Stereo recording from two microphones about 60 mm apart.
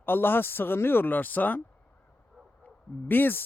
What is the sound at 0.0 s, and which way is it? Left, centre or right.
Speech, left.